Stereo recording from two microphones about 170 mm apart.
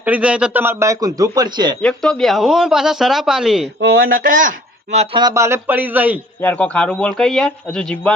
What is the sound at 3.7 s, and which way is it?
Speech, 70° right (ahead or behind).